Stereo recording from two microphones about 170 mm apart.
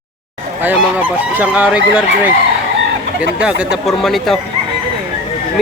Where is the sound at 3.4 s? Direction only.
5° right (ahead or behind).